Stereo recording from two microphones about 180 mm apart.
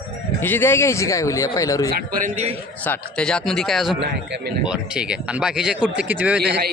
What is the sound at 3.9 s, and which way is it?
Speech, 75° right (ahead or behind).